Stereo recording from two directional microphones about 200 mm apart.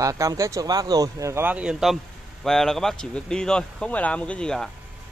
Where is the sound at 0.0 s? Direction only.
15° right (ahead or behind).